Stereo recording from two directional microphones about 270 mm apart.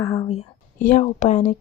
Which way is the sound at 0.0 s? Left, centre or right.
Centre.